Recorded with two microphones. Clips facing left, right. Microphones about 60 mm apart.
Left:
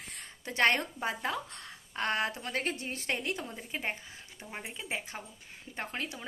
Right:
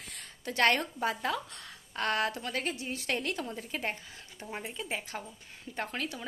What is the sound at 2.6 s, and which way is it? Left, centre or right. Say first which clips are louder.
Speech: even; left.